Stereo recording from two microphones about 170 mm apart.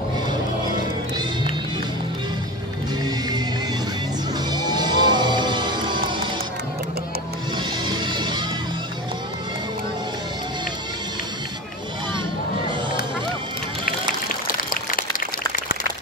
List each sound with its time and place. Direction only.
4.5 s music: 25° right (ahead or behind)
7.5 s music: 25° right (ahead or behind)
14.3 s a sound: 55° left (ahead or behind)